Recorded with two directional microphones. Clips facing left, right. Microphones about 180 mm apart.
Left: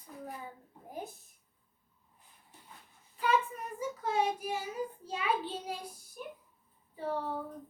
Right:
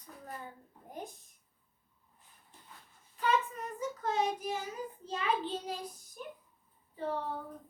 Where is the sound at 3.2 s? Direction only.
10° left (ahead or behind).